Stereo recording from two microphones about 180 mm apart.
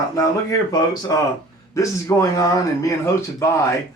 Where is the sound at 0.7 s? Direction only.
25° left (ahead or behind).